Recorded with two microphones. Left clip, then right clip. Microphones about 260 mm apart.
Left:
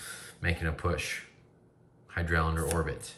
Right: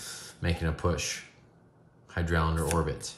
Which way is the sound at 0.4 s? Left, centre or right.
Centre.